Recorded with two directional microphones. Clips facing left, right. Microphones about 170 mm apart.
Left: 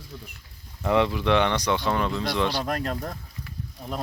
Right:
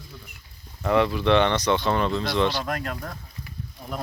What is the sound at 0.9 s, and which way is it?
Speech, 15° left (ahead or behind).